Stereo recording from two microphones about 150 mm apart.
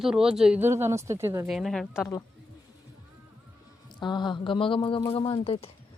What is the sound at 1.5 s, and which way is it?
Speech, centre (ahead or behind).